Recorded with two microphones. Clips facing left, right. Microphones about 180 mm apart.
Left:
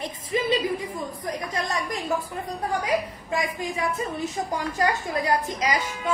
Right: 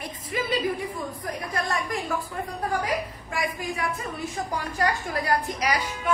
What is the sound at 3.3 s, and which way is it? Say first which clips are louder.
A woman's voice: left 2 dB; 20° left (ahead or behind).